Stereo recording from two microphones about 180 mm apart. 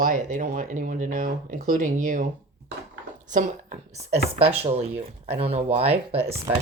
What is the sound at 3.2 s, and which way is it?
A woman's voice, 45° right (ahead or behind).